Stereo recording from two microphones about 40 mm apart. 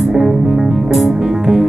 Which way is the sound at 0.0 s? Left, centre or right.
Centre.